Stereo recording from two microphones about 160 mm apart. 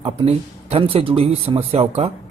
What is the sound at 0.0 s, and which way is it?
Speech, 40° right (ahead or behind).